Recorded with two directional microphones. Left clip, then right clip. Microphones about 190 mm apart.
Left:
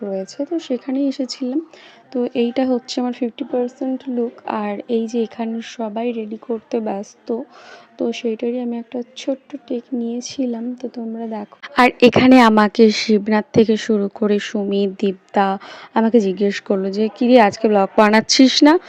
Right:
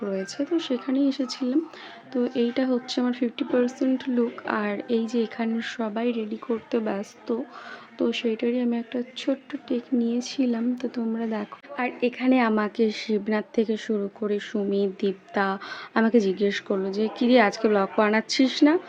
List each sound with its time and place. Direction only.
0.1 s speech: 25° left (ahead or behind)
4.4 s speech: 30° left (ahead or behind)
11.7 s speech: 60° left (ahead or behind)